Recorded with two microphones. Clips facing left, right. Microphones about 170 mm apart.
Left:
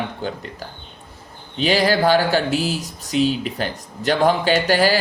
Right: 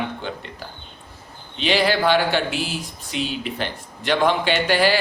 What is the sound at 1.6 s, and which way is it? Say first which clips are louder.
Speech: left 2 dB; 40° left (ahead or behind).